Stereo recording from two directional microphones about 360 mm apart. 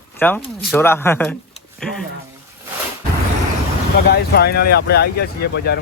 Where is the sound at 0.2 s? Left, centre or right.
Centre.